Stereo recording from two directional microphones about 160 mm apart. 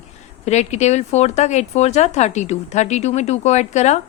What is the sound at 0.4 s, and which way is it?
Speech, 45° left (ahead or behind).